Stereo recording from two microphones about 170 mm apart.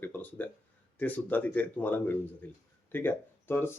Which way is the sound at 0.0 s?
10° left (ahead or behind).